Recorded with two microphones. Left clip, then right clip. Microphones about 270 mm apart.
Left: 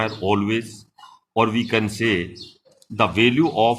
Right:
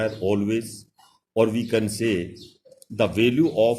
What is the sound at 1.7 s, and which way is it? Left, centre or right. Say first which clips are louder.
Speech: left 3 dB; centre.